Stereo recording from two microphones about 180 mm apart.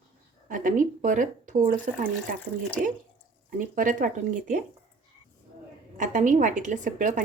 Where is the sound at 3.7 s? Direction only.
45° right (ahead or behind).